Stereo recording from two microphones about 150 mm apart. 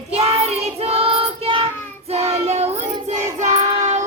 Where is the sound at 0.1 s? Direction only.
40° right (ahead or behind).